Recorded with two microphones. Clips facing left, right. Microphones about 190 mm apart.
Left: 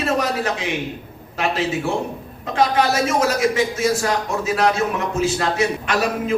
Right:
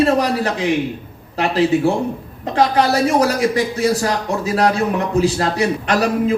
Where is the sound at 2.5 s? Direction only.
35° right (ahead or behind).